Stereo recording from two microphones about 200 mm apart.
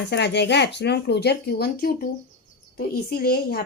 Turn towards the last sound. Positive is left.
turn(degrees=50)  # may be behind; listen again after turning